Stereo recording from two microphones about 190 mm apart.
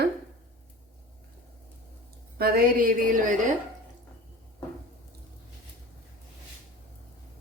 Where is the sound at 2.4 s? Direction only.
50° right (ahead or behind).